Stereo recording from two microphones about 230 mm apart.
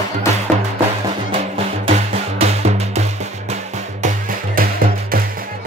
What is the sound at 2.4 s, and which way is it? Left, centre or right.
Music, right.